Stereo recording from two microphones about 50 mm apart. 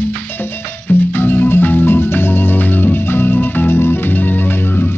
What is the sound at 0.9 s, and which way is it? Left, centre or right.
Music, left.